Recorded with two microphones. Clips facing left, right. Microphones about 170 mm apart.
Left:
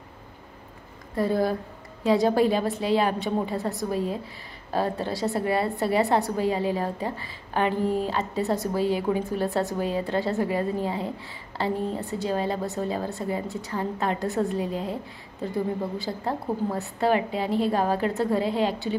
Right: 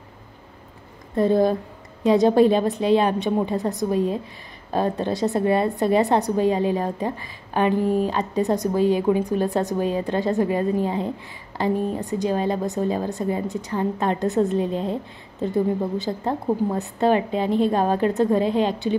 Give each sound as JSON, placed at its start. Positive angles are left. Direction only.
{"t": 1.1, "sound": "a woman's voice", "side_deg": -20}